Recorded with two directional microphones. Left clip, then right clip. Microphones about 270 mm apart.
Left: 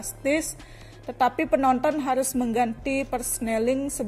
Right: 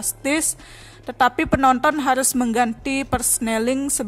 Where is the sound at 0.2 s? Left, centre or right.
Right.